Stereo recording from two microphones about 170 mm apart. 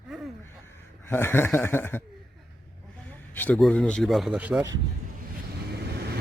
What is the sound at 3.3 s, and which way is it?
Speech, 10° left (ahead or behind).